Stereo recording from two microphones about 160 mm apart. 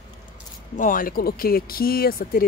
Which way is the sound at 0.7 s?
55° left (ahead or behind).